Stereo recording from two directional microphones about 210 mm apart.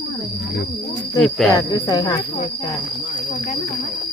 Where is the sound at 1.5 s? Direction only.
15° left (ahead or behind).